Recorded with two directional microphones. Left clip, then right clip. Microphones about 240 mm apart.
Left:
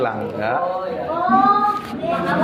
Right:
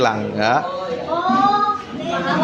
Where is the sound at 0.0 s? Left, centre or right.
Right.